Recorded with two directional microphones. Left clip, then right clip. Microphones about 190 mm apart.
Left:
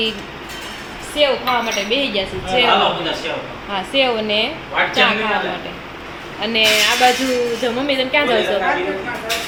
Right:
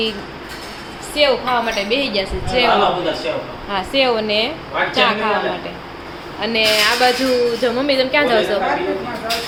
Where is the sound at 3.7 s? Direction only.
5° right (ahead or behind).